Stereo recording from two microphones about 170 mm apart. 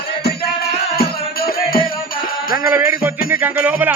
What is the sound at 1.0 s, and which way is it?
Music, 60° left (ahead or behind).